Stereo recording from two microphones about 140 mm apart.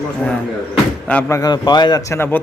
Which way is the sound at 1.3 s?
30° left (ahead or behind).